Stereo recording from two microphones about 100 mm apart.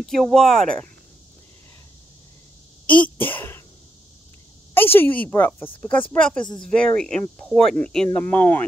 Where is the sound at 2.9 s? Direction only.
15° left (ahead or behind).